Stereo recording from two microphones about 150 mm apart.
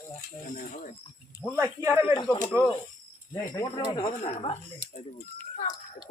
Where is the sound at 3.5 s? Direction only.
20° left (ahead or behind).